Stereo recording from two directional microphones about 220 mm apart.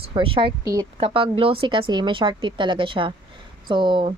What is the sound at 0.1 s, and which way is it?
Speech, 25° right (ahead or behind).